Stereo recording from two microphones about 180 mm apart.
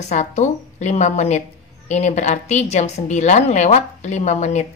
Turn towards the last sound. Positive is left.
turn(degrees=40)  # may be behind; listen again after turning